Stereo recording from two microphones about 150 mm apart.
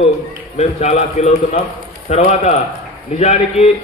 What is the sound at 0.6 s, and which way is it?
A man's voice, 45° left (ahead or behind).